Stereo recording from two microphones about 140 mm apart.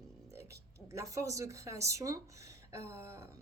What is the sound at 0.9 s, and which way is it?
A woman's voice, 25° right (ahead or behind).